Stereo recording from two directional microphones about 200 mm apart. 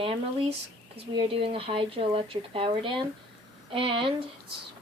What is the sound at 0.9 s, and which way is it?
Speech, 30° right (ahead or behind).